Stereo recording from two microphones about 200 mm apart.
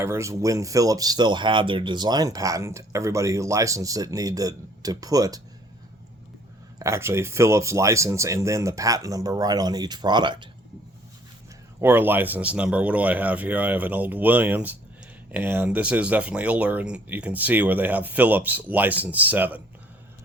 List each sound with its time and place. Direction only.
0.0 s speech: 15° right (ahead or behind)
6.7 s speech: 15° right (ahead or behind)
11.8 s speech: 10° right (ahead or behind)